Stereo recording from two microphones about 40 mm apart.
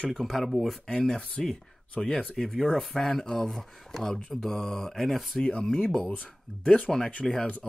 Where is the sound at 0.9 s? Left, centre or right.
Centre.